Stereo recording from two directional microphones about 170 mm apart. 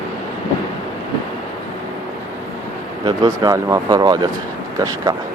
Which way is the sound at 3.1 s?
20° right (ahead or behind).